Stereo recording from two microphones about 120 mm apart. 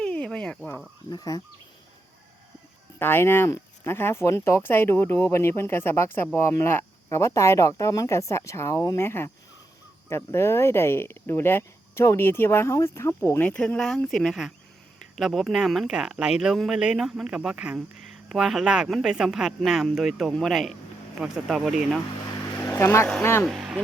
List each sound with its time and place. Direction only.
0.0 s a sound: 10° left (ahead or behind)
1.1 s cricket: 30° left (ahead or behind)
3.0 s speech: 20° left (ahead or behind)
13.5 s speech: 10° left (ahead or behind)
22.6 s vehicle: 15° left (ahead or behind)
23.2 s speech: 20° left (ahead or behind)
23.5 s speech: 5° right (ahead or behind)